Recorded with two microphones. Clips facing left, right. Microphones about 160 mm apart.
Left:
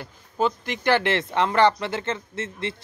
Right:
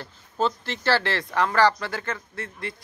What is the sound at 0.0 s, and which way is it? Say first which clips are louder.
Speech: left 1 dB; 10° left (ahead or behind).